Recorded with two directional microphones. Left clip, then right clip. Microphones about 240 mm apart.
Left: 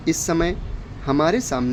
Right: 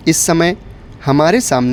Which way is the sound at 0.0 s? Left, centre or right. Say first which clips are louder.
Right 8 dB; right.